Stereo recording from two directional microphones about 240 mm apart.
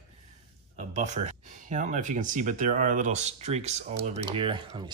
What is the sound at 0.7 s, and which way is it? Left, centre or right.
Speech, right.